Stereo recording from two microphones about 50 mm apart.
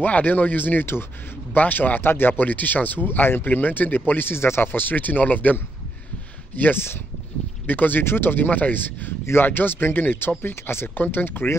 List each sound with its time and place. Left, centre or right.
0.0 s speech: left
8.0 s speech: left
9.2 s speech: left
10.4 s speech: left
11.0 s speech: left